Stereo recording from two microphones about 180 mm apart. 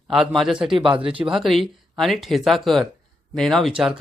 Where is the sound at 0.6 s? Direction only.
25° right (ahead or behind).